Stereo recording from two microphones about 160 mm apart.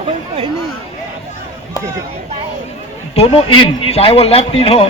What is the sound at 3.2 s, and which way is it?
A man's voice, 40° left (ahead or behind).